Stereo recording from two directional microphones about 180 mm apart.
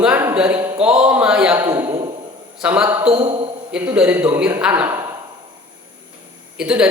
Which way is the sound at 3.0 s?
35° right (ahead or behind).